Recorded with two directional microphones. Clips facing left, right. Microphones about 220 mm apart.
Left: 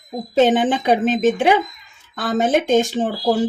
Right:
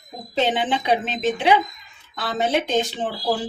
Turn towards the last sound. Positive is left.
turn(degrees=45)  # may be behind; listen again after turning